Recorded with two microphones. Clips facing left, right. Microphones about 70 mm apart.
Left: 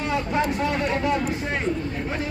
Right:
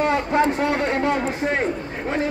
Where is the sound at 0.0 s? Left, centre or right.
Right.